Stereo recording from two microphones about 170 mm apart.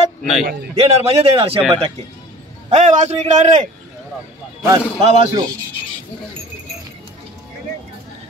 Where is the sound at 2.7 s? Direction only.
45° right (ahead or behind).